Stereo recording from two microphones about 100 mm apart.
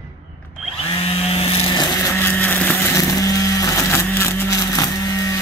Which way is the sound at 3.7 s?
30° left (ahead or behind).